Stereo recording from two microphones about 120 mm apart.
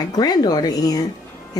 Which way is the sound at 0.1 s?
35° left (ahead or behind).